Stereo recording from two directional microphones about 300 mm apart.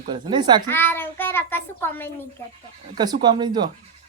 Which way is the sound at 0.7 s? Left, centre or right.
Centre.